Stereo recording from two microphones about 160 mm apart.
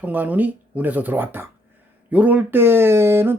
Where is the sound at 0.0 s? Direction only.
10° right (ahead or behind).